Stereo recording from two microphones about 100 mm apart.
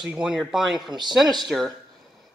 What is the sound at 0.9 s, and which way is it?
Speech, 45° right (ahead or behind).